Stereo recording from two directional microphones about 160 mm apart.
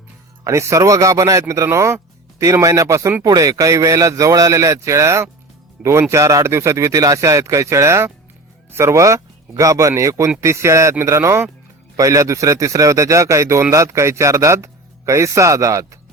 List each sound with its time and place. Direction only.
0.4 s speech: 20° right (ahead or behind)